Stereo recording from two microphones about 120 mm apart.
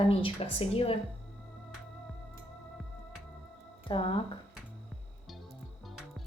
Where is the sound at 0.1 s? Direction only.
50° left (ahead or behind).